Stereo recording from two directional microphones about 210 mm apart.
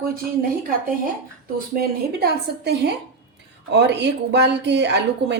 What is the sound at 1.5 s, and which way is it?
A woman's voice, 45° right (ahead or behind).